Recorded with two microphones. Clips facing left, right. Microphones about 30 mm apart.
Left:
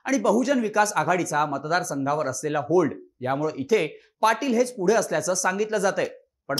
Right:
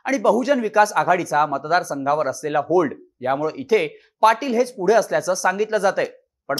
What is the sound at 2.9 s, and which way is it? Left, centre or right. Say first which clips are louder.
Speech: right 4 dB; centre.